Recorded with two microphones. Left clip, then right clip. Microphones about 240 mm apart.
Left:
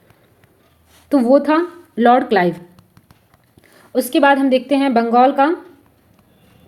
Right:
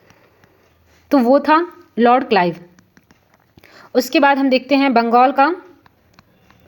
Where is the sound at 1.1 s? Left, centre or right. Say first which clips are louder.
Right 1 dB; right.